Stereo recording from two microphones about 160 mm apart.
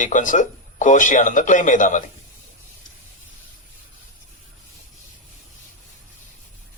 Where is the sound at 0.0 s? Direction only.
55° left (ahead or behind).